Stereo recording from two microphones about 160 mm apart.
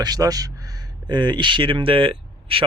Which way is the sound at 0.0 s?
25° right (ahead or behind).